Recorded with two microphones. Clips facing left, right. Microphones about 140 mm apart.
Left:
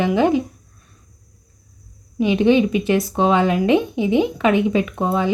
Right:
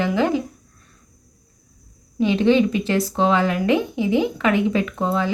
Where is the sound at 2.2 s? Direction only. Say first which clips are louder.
Left 1 dB; 15° left (ahead or behind).